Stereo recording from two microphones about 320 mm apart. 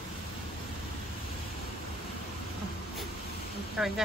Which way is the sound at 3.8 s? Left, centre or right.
Centre.